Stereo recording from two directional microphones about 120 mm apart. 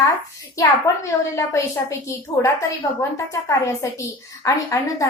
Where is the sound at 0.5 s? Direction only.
25° left (ahead or behind).